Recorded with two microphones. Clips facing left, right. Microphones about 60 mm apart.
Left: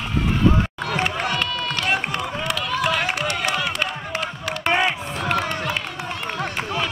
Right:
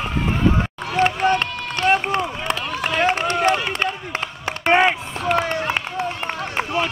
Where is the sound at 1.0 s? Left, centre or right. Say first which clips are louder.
Right 8 dB; right.